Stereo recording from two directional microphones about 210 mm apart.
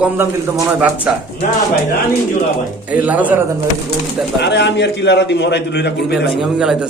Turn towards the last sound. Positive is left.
turn(degrees=55)  # may be behind; listen again after turning